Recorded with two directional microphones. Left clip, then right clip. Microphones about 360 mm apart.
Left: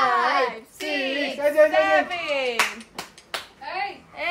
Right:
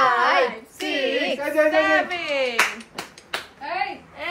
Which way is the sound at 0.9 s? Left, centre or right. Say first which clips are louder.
Right 3 dB; centre.